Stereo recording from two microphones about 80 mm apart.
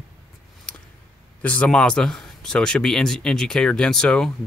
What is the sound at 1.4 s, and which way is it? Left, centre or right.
Speech, centre.